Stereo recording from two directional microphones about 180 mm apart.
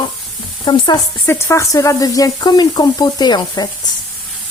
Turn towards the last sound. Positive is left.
turn(degrees=25)  # may be behind; listen again after turning